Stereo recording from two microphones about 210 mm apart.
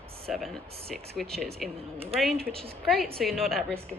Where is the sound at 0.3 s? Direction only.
Centre (ahead or behind).